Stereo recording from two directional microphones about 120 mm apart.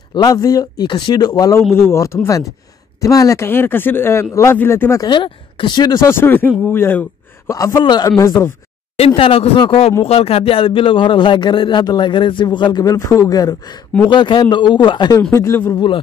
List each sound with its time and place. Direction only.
0.1 s speech: 30° left (ahead or behind)
1.7 s speech: 20° left (ahead or behind)
5.0 s speech: 40° left (ahead or behind)
8.9 s speech: 55° left (ahead or behind); by 15.1 s 40° left (ahead or behind)
15.3 s speech: 20° left (ahead or behind)
15.7 s speech: 40° left (ahead or behind)